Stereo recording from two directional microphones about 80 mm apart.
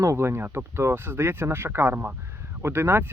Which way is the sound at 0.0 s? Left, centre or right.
Right.